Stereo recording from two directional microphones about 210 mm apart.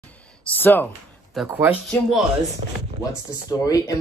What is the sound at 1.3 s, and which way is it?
Speech, 5° right (ahead or behind).